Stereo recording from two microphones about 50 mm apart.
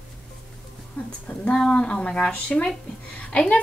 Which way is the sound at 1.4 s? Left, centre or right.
Centre.